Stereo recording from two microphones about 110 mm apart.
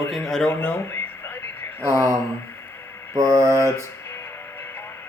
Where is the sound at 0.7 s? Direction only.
20° left (ahead or behind).